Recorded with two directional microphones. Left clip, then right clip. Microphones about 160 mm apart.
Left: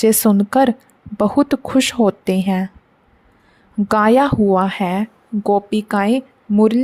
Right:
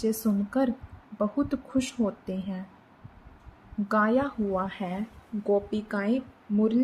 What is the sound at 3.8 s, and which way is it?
A woman's voice, 90° left.